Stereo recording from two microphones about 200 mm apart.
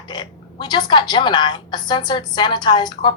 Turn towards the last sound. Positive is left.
turn(degrees=20)  # may be behind; listen again after turning